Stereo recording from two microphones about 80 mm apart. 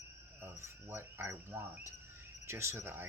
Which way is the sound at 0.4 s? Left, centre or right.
Right.